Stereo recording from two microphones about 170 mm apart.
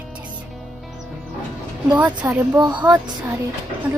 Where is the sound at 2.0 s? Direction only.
10° right (ahead or behind).